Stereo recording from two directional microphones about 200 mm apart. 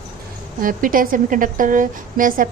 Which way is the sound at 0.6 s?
45° right (ahead or behind).